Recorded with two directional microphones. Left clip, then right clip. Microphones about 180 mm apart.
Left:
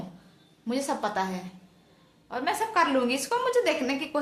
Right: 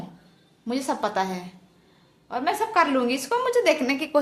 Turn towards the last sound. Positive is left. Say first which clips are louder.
# right 6 dB
turn(degrees=-30)  # may be behind; listen again after turning